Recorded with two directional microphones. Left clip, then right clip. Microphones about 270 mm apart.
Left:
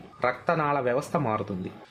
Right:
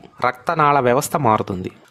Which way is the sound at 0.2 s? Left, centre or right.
Right.